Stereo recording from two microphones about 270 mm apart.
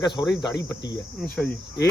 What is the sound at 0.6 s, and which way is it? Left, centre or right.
Cricket, left.